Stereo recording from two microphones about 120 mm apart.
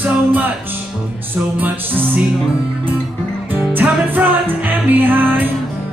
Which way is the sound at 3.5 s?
15° right (ahead or behind).